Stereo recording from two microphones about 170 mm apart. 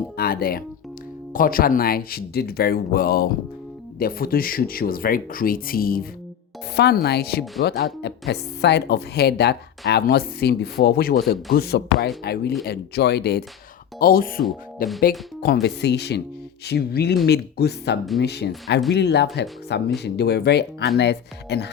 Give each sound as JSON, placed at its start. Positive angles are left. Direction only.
{"t": 0.2, "sound": "speech", "side_deg": 65}
{"t": 6.7, "sound": "speech", "side_deg": 75}
{"t": 8.3, "sound": "speech", "side_deg": 80}
{"t": 14.0, "sound": "speech", "side_deg": 60}
{"t": 15.4, "sound": "speech", "side_deg": 70}